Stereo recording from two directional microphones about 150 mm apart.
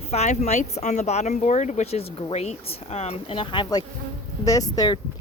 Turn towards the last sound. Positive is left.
turn(degrees=25)  # may be behind; listen again after turning